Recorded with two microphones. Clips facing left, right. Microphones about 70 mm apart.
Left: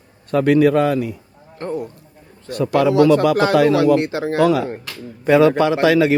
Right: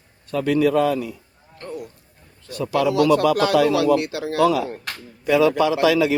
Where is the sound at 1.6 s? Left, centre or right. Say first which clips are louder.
Left 8 dB; left.